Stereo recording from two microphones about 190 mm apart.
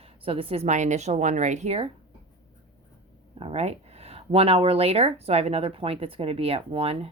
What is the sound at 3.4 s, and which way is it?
Speech, 30° right (ahead or behind).